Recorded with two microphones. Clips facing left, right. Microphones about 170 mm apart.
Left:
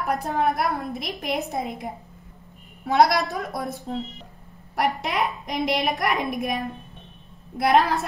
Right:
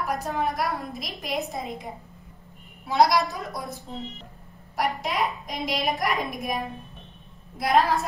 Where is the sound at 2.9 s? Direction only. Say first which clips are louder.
Left 2 dB; 65° left (ahead or behind).